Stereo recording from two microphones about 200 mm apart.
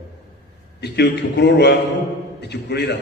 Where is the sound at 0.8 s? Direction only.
55° left (ahead or behind).